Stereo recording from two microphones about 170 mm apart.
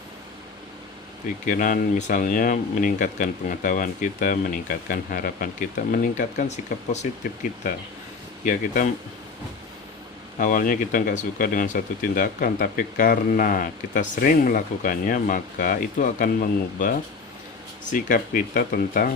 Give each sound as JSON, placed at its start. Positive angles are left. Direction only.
{"t": 1.5, "sound": "speech", "side_deg": 55}
{"t": 10.3, "sound": "speech", "side_deg": 55}
{"t": 17.9, "sound": "speech", "side_deg": 55}